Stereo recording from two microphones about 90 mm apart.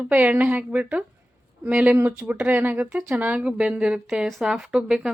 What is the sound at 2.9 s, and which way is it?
A woman's voice, 5° right (ahead or behind).